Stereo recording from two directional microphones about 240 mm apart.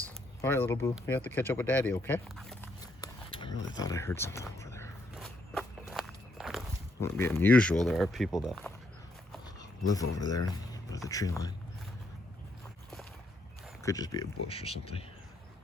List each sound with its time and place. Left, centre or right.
0.4 s speech: centre
2.8 s a sound: centre
5.1 s walk: centre
7.0 s speech: centre
9.6 s a sound: centre
11.1 s speech: centre
13.8 s speech: centre